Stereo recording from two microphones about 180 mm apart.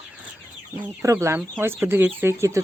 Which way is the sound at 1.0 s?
15° right (ahead or behind).